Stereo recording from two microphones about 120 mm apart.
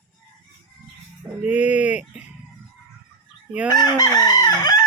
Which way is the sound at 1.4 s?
10° right (ahead or behind).